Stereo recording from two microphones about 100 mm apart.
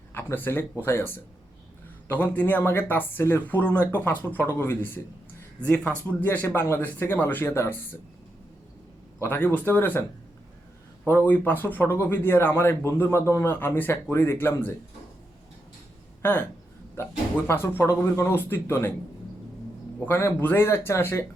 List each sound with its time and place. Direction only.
0.1 s speech: 20° left (ahead or behind)
9.1 s speech: 20° left (ahead or behind)
11.0 s speech: 20° left (ahead or behind)
16.9 s speech: 25° left (ahead or behind)
20.1 s speech: 25° left (ahead or behind)